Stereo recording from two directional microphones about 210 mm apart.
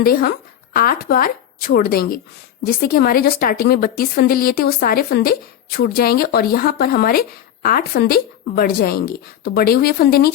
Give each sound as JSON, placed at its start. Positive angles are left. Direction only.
{"t": 0.0, "sound": "speech", "side_deg": 45}